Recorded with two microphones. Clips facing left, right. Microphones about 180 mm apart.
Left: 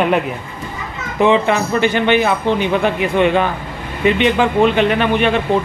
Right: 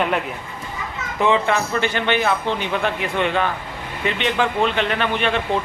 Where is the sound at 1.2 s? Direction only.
15° left (ahead or behind).